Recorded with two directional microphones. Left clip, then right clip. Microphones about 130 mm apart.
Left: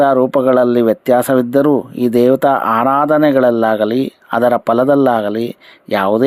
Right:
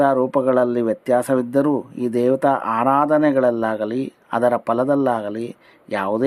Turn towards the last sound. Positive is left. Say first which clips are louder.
# left 8 dB
turn(degrees=30)  # may be behind; listen again after turning